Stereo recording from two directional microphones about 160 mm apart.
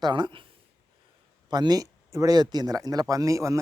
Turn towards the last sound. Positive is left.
turn(degrees=-20)  # may be behind; listen again after turning